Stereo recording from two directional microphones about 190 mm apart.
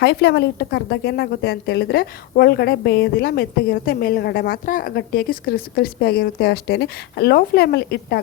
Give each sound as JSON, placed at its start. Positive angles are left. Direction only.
{"t": 0.0, "sound": "a woman's voice", "side_deg": 60}